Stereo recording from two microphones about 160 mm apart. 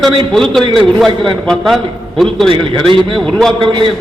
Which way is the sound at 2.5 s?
35° right (ahead or behind).